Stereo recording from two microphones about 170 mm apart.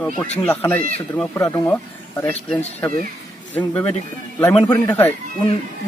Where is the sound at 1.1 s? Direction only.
10° left (ahead or behind).